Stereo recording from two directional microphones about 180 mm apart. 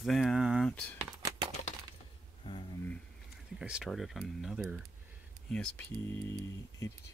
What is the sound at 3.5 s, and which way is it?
Speech, 5° right (ahead or behind).